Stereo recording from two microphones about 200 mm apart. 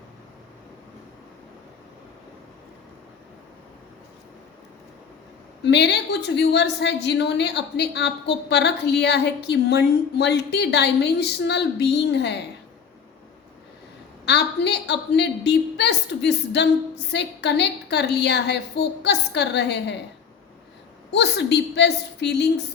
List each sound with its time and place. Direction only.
5.6 s a woman's voice: 60° left (ahead or behind)
14.3 s a sound: 60° left (ahead or behind)
17.1 s a woman's voice: 60° left (ahead or behind)
21.1 s a woman's voice: 60° left (ahead or behind)